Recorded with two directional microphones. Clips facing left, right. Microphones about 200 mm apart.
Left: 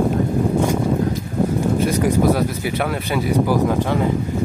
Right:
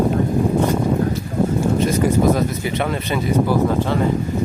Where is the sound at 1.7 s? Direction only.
10° left (ahead or behind).